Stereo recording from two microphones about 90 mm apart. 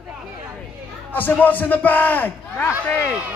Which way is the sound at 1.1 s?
20° left (ahead or behind).